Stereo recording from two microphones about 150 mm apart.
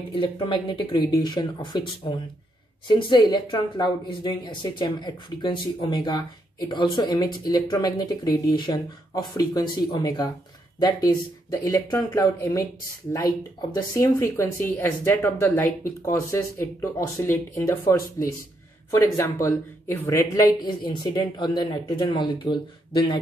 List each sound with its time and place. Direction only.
0.1 s speech: 35° left (ahead or behind)
11.6 s speech: 20° left (ahead or behind)